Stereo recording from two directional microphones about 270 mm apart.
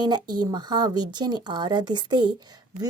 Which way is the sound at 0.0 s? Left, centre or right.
Centre.